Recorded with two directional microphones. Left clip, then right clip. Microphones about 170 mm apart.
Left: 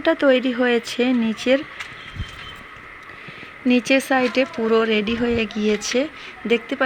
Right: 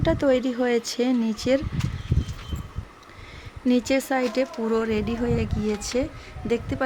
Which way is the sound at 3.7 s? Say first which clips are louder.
Left 5 dB; 5° left (ahead or behind).